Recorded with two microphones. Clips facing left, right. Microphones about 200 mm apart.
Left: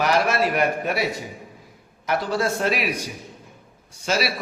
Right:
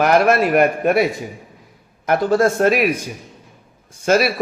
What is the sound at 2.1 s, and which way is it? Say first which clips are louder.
Speech: right 8 dB; 50° right (ahead or behind).